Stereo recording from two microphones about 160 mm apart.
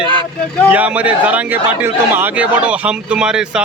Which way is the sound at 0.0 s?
30° right (ahead or behind).